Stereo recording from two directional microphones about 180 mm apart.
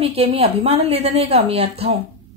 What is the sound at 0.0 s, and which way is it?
A woman's voice, 30° right (ahead or behind).